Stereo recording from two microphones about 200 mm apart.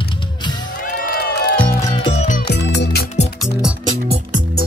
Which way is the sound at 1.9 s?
35° left (ahead or behind).